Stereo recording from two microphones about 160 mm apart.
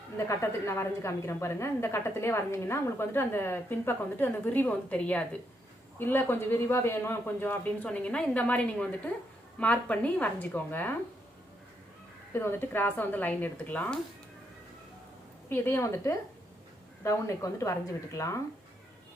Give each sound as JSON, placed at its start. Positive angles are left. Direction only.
{"t": 0.2, "sound": "a woman's voice", "side_deg": 15}
{"t": 12.3, "sound": "a woman's voice", "side_deg": 15}
{"t": 15.4, "sound": "a woman's voice", "side_deg": 15}